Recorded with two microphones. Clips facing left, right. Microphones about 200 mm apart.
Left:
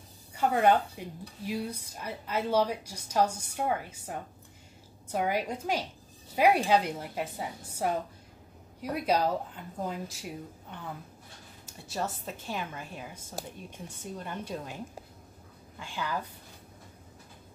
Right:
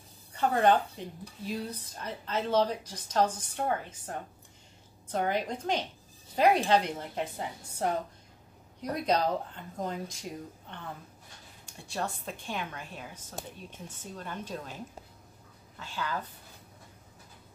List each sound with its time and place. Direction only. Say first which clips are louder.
0.3 s a woman's voice: even; 10° left (ahead or behind)
15.8 s speech: left 1 dB; 10° left (ahead or behind)